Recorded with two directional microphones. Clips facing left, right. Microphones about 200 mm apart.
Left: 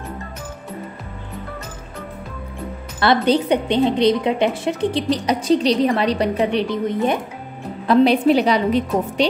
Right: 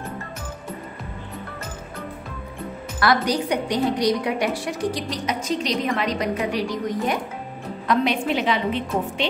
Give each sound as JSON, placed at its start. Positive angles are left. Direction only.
{"t": 3.0, "sound": "a woman's voice", "side_deg": 25}
{"t": 7.8, "sound": "a woman's voice", "side_deg": 35}